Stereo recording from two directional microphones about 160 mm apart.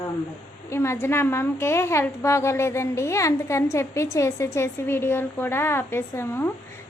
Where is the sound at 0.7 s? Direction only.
15° left (ahead or behind).